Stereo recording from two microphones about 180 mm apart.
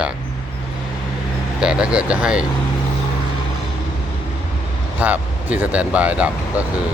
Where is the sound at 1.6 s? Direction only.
5° right (ahead or behind).